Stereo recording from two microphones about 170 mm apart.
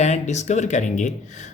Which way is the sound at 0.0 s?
40° left (ahead or behind).